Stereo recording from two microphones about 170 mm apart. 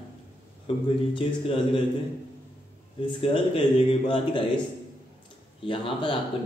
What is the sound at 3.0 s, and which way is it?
Speech, 35° left (ahead or behind).